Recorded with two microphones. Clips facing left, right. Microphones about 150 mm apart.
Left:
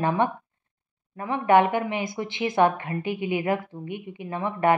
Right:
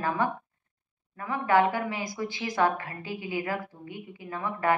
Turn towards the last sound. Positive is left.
turn(degrees=25)  # may be behind; listen again after turning